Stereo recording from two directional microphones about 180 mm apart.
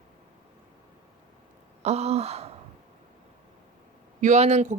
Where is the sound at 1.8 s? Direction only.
35° right (ahead or behind).